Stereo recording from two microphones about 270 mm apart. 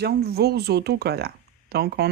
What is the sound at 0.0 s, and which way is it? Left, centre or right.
Speech, right.